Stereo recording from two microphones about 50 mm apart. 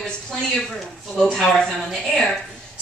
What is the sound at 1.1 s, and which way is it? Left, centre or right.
A woman's voice, centre.